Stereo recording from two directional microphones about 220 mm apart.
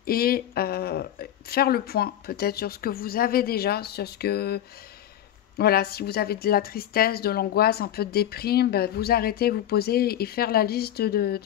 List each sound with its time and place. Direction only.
0.0 s speech: 45° left (ahead or behind)
5.6 s speech: 45° left (ahead or behind)